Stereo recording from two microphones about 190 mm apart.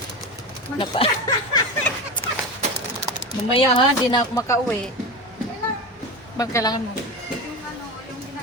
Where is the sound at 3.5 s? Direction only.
25° left (ahead or behind).